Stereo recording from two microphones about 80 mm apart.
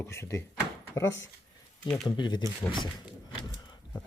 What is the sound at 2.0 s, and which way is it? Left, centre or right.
Speech, left.